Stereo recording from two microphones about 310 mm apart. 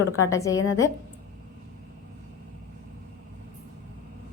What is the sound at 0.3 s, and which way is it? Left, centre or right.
Speech, centre.